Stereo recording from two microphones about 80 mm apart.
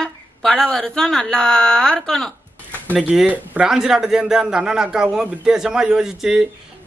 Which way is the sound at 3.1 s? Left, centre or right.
Centre.